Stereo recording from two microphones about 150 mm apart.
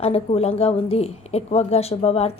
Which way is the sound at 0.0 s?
40° left (ahead or behind).